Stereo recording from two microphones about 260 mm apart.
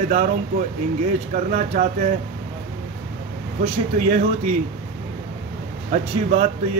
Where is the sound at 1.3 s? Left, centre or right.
Right.